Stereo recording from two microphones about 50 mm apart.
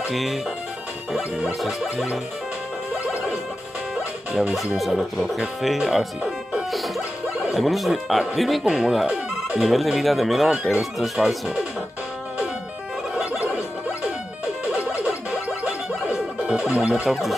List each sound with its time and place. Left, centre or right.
0.1 s speech: centre
1.6 s speech: centre
4.6 s speech: centre
7.5 s speech: centre
10.5 s speech: centre
14.6 s music: centre
17.1 s speech: centre